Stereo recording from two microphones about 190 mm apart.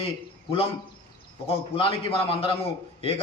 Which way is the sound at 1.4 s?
30° left (ahead or behind).